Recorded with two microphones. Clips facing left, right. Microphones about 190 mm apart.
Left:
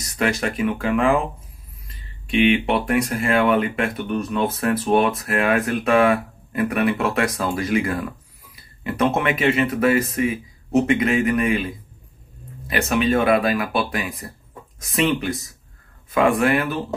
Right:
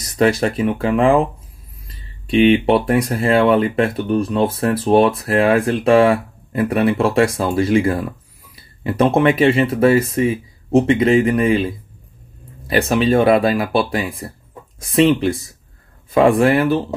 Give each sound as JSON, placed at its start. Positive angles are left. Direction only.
{"t": 0.0, "sound": "speech", "side_deg": -35}
{"t": 2.2, "sound": "speech", "side_deg": -35}